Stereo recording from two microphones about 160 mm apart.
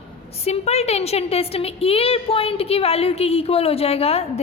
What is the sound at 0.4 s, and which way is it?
A woman's voice, 40° left (ahead or behind).